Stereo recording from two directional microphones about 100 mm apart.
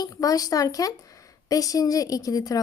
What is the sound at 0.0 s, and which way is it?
A woman's voice, 35° left (ahead or behind).